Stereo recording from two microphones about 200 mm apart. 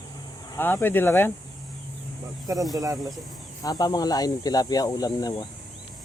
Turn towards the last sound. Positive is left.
turn(degrees=20)  # may be behind; listen again after turning